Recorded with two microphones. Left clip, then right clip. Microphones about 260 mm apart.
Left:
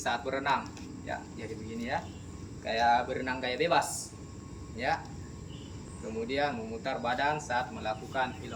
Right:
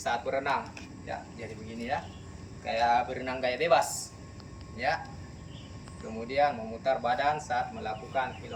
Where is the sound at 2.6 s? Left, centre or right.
Centre.